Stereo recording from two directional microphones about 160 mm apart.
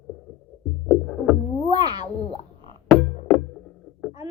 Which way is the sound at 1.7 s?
25° right (ahead or behind).